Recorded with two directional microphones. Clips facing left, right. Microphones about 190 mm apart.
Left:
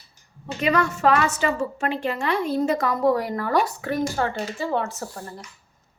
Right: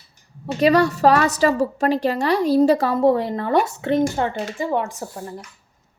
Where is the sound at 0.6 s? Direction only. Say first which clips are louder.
Right 6 dB; 35° right (ahead or behind); by 5.2 s 15° right (ahead or behind).